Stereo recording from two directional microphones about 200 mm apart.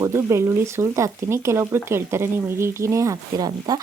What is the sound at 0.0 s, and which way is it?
Speech, 15° right (ahead or behind).